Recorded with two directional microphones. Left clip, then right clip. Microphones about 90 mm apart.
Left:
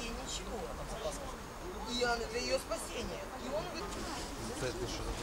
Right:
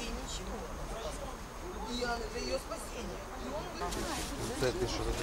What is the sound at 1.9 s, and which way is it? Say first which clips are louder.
Speech: left 3 dB; 10° left (ahead or behind).